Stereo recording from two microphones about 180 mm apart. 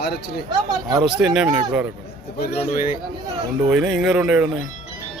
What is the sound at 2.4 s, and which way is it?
Speech, 55° left (ahead or behind).